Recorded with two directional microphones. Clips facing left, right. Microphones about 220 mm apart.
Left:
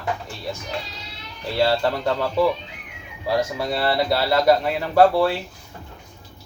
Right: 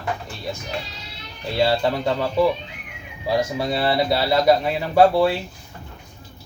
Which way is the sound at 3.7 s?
20° right (ahead or behind).